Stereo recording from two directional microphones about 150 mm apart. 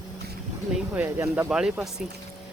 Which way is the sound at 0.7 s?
15° right (ahead or behind).